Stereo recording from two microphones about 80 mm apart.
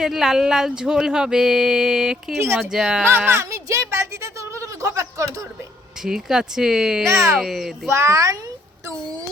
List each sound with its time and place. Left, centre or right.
0.0 s a sound: centre
2.6 s speech: centre
3.1 s a woman's voice: right
6.0 s a sound: centre
7.3 s speech: centre
7.9 s a child's voice: right